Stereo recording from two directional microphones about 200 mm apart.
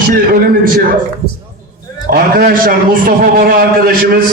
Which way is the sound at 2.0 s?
50° right (ahead or behind).